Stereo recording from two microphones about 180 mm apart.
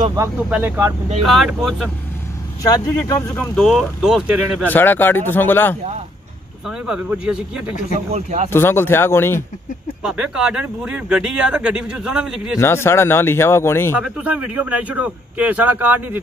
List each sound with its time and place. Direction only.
0.5 s a man's voice: 10° right (ahead or behind)
1.2 s speech: centre (ahead or behind)
2.6 s speech: 20° left (ahead or behind); by 4.6 s 5° right (ahead or behind)
4.6 s speech: 10° left (ahead or behind)
6.9 s speech: 5° right (ahead or behind)
8.1 s speech: 40° right (ahead or behind)
8.5 s speech: 15° left (ahead or behind)
10.0 s speech: 5° right (ahead or behind)
12.5 s speech: 15° left (ahead or behind)
13.9 s a man's voice: 5° right (ahead or behind)